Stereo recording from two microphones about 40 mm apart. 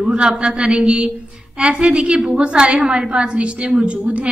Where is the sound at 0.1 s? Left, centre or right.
Right.